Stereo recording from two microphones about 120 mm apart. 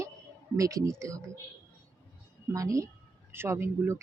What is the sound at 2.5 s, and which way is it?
Speech, 25° right (ahead or behind).